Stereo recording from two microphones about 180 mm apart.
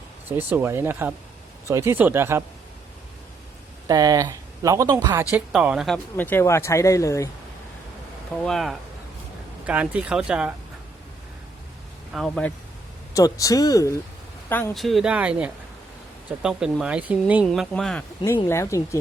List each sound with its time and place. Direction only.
0.3 s speech: 10° right (ahead or behind)
3.8 s speech: 20° right (ahead or behind)
5.5 s speech: 5° right (ahead or behind)
6.1 s speech: 10° left (ahead or behind)
8.4 s speech: centre (ahead or behind)
12.1 s speech: centre (ahead or behind)
13.1 s speech: 20° left (ahead or behind)
14.5 s speech: 5° left (ahead or behind)
18.4 s speech: 15° left (ahead or behind)